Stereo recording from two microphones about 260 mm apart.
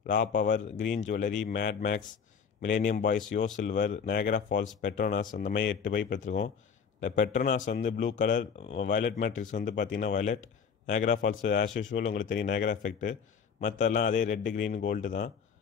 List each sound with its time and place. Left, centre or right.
0.0 s a man's voice: left
5.8 s a man's voice: left